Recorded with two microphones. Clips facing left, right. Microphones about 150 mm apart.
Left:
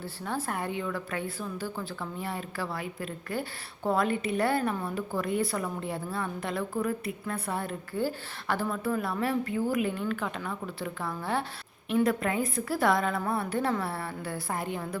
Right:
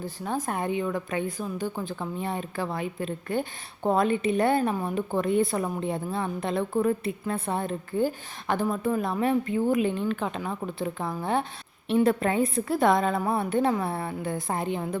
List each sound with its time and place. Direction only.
0.0 s a woman's voice: 15° right (ahead or behind)